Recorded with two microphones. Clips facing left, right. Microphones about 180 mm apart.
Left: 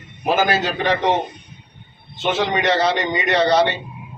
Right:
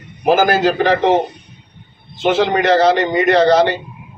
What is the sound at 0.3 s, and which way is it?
Speech, 50° right (ahead or behind).